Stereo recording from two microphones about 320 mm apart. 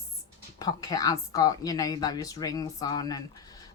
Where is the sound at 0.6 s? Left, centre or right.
Centre.